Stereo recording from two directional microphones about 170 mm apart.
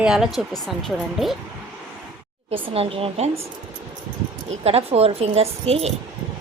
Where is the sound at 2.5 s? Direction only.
35° right (ahead or behind).